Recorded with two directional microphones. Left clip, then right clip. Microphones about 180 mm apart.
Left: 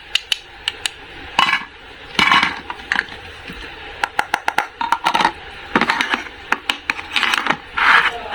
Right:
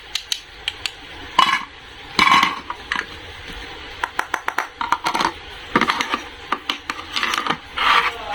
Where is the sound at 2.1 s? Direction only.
5° right (ahead or behind).